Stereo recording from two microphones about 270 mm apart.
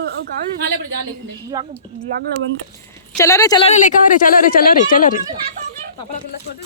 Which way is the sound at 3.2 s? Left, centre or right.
Centre.